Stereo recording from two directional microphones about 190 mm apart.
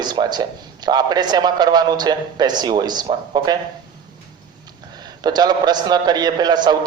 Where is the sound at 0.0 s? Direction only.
20° right (ahead or behind).